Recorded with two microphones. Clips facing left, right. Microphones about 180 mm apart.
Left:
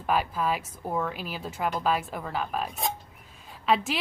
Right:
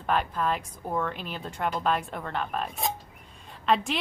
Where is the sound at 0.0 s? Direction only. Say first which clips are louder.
Even; 5° left (ahead or behind).